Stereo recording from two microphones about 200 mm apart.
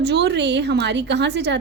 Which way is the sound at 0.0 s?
60° right (ahead or behind).